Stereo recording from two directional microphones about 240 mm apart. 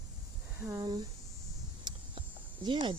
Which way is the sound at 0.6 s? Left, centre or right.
Centre.